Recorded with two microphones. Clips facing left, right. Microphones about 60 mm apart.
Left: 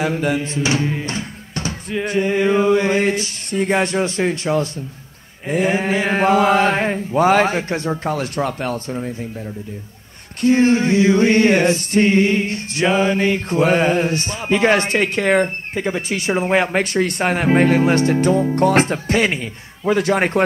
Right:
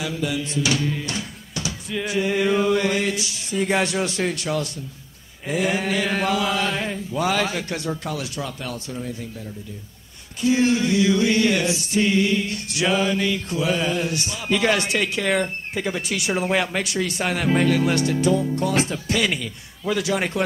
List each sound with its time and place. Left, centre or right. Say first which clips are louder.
0.0 s speech: left 6 dB; left
2.0 s chant: left 4 dB; left
10.4 s chant: left 5 dB; left